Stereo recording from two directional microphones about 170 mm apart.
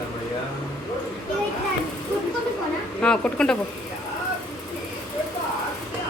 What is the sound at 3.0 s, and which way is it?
Speech, 5° left (ahead or behind).